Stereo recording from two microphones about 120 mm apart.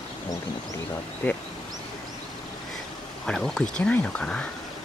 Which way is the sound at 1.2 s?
15° left (ahead or behind).